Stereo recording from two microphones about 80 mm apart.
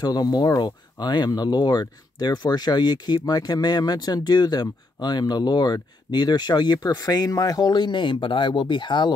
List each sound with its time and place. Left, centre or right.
0.0 s speech: left